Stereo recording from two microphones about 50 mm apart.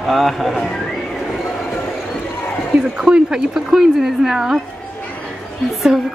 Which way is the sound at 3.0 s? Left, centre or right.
Centre.